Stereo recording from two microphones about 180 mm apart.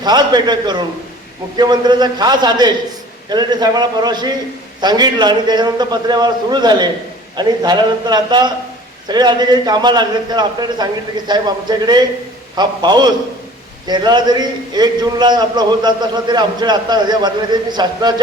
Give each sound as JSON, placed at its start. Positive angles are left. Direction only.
{"t": 0.0, "sound": "a man's voice", "side_deg": -25}